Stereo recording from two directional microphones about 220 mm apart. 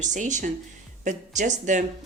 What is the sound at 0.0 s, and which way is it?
Speech, 35° right (ahead or behind).